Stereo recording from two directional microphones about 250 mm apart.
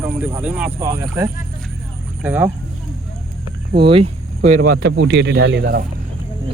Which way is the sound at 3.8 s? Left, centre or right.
Right.